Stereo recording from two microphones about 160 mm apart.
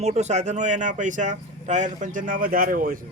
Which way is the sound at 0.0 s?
45° right (ahead or behind).